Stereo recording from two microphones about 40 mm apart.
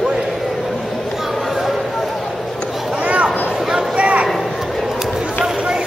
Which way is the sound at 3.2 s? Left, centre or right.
Centre.